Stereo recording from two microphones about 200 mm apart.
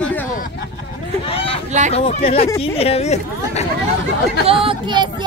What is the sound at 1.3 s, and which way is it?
Hubbub, 30° left (ahead or behind).